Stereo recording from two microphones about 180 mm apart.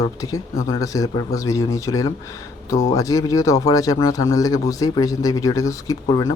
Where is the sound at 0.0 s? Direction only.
20° left (ahead or behind).